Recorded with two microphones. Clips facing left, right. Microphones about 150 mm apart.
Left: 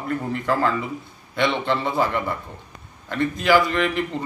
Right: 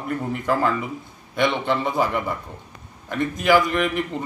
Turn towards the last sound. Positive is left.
turn(degrees=-10)  # may be behind; listen again after turning